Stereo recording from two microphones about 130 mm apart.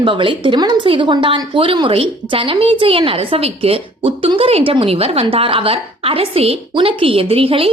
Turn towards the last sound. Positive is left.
turn(degrees=-45)  # may be behind; listen again after turning